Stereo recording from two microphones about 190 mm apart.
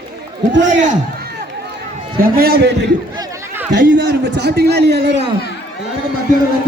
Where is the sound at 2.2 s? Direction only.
55° right (ahead or behind).